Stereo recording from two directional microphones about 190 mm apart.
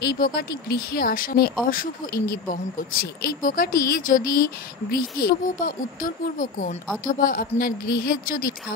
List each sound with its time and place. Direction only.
0.0 s speech: 55° left (ahead or behind)